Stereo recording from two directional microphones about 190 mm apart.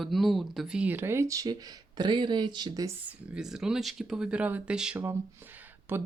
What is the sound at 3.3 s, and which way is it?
Speech, 5° right (ahead or behind).